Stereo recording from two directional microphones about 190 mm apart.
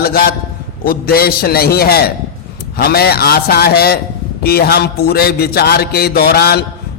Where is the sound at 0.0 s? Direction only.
55° left (ahead or behind).